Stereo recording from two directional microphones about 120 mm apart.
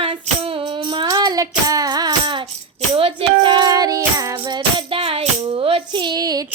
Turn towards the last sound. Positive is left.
turn(degrees=-30)  # may be behind; listen again after turning